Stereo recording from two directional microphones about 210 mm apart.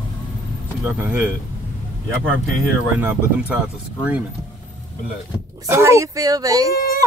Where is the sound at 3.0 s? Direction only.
10° right (ahead or behind).